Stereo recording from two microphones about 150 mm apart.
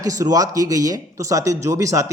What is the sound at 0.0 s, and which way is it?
Speech, 25° right (ahead or behind).